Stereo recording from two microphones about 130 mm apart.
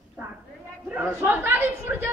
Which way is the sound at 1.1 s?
15° right (ahead or behind).